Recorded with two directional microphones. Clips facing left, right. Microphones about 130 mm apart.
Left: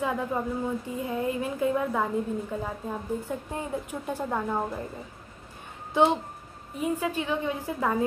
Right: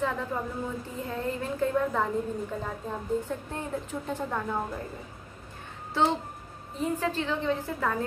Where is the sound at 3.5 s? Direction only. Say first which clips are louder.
Left 1 dB; 10° left (ahead or behind).